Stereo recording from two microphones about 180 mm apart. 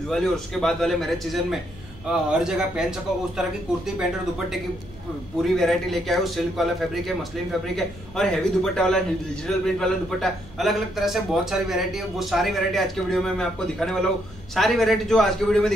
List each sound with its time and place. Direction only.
0.1 s a man's voice: centre (ahead or behind)